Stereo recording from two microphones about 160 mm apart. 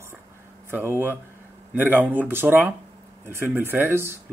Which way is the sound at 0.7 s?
15° right (ahead or behind).